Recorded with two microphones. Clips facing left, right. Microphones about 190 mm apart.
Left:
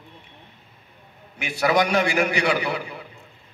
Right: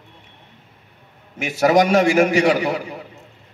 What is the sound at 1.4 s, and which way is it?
A man's voice, 45° right (ahead or behind).